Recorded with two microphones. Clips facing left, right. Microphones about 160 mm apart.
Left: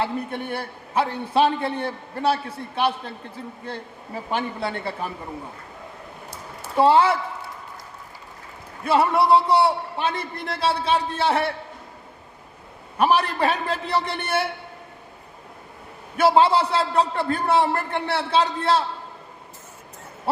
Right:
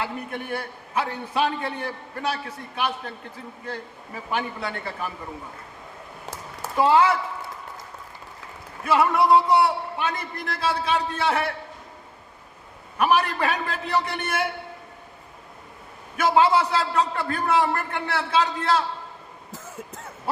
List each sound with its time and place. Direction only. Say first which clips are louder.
0.0 s a man's voice: left 4 dB; 30° left (ahead or behind)
4.3 s a man's voice: left 2 dB; 30° left (ahead or behind)
6.7 s a man's voice: left 2 dB; 30° left (ahead or behind)
8.9 s a man's voice: left 1 dB; 30° left (ahead or behind)
13.0 s a man's voice: left 2 dB; 30° left (ahead or behind)
16.1 s a man's voice: left 2 dB; 30° left (ahead or behind)